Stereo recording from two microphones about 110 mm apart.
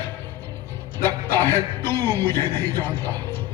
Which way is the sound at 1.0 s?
20° left (ahead or behind).